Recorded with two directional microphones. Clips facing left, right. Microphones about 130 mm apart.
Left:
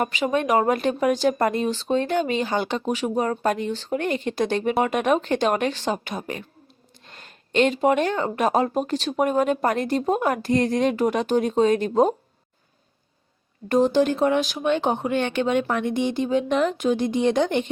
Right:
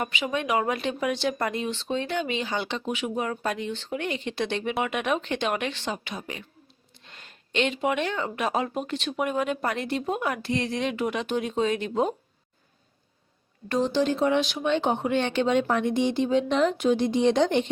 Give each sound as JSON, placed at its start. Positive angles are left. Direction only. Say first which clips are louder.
{"t": 0.0, "sound": "speech", "louder": "left 6 dB", "side_deg": 40}
{"t": 13.7, "sound": "speech", "louder": "left 5 dB", "side_deg": 45}